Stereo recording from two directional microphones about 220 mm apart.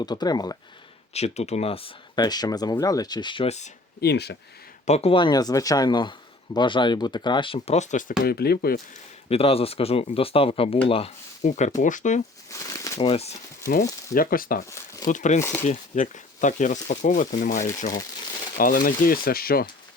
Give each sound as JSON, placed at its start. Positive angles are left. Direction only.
{"t": 0.0, "sound": "speech", "side_deg": 20}
{"t": 1.1, "sound": "speech", "side_deg": 30}
{"t": 4.0, "sound": "speech", "side_deg": 50}
{"t": 4.9, "sound": "speech", "side_deg": 25}
{"t": 8.2, "sound": "speech", "side_deg": 45}
{"t": 9.3, "sound": "speech", "side_deg": 25}
{"t": 12.6, "sound": "speech", "side_deg": 15}
{"t": 13.7, "sound": "speech", "side_deg": 40}
{"t": 15.4, "sound": "speech", "side_deg": 10}
{"t": 15.6, "sound": "speech", "side_deg": 35}